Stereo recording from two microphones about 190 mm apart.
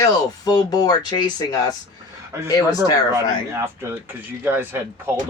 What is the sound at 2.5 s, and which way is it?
Speech, 20° left (ahead or behind).